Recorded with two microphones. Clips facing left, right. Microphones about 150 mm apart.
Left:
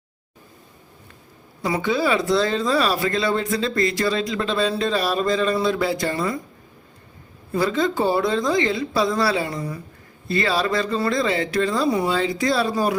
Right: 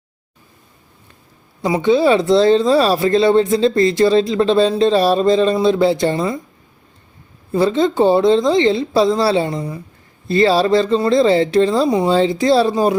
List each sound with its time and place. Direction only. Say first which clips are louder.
1.6 s speech: right 8 dB; 20° right (ahead or behind)
7.5 s speech: right 6 dB; 25° right (ahead or behind)